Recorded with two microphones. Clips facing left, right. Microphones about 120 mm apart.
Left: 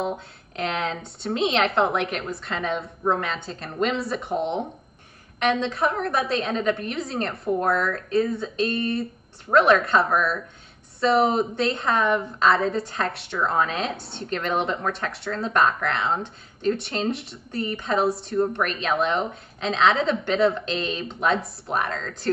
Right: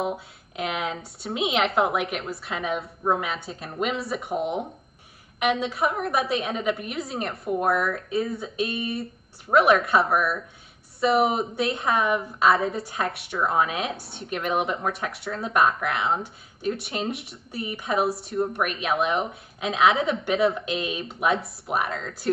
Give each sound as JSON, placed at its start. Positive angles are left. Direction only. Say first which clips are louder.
{"t": 0.0, "sound": "a woman's voice", "louder": "even", "side_deg": -5}
{"t": 13.9, "sound": "speech", "louder": "left 3 dB", "side_deg": 25}
{"t": 14.3, "sound": "a woman's voice", "louder": "left 1 dB", "side_deg": -10}